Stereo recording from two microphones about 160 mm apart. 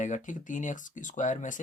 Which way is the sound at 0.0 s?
50° left (ahead or behind).